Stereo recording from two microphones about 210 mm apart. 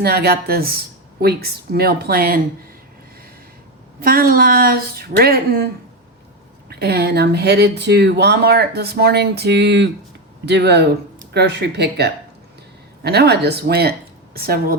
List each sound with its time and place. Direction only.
0.0 s speech: 50° right (ahead or behind)
4.0 s speech: 45° right (ahead or behind)
6.7 s speech: 50° right (ahead or behind)